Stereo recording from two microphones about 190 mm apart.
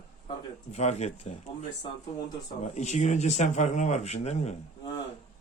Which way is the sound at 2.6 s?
35° left (ahead or behind).